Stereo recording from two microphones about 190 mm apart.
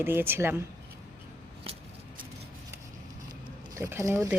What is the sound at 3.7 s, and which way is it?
Speech, 15° right (ahead or behind).